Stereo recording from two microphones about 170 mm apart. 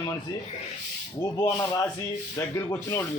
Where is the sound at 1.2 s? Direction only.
15° left (ahead or behind).